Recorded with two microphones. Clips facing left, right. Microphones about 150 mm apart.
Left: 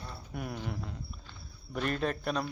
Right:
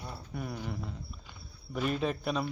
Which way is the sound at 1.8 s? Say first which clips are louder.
Right 1 dB; 5° right (ahead or behind).